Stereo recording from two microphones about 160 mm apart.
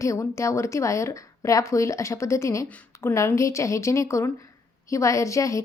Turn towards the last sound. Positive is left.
turn(degrees=20)  # may be behind; listen again after turning